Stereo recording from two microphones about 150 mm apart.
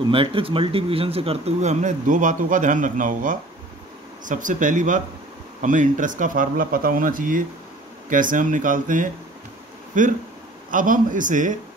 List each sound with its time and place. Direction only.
0.1 s speech: 35° right (ahead or behind); by 11.5 s 60° right (ahead or behind)